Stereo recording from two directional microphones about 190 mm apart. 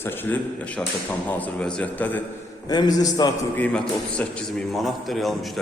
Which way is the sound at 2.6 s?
20° left (ahead or behind).